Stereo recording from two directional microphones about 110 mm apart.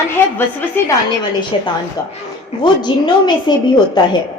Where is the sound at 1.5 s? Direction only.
50° left (ahead or behind).